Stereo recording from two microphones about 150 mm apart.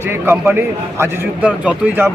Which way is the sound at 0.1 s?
15° right (ahead or behind).